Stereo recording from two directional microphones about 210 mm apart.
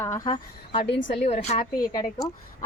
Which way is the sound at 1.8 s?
15° left (ahead or behind).